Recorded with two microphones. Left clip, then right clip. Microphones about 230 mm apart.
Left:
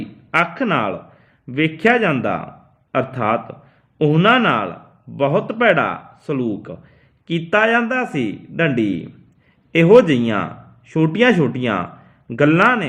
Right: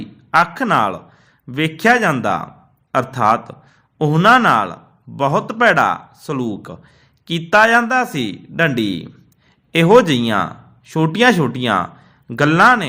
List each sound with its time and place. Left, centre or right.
0.3 s a man's voice: right